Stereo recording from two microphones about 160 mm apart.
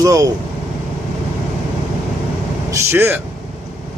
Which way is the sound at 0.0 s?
20° right (ahead or behind).